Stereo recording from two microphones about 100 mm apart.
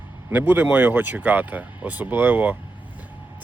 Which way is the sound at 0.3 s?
20° right (ahead or behind).